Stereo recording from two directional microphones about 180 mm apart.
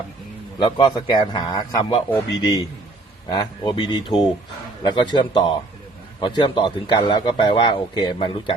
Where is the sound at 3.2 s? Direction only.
25° left (ahead or behind).